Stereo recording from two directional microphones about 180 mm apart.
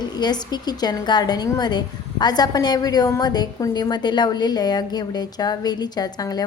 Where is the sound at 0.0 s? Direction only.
25° left (ahead or behind).